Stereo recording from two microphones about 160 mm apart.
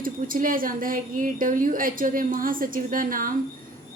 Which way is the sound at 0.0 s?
60° right (ahead or behind).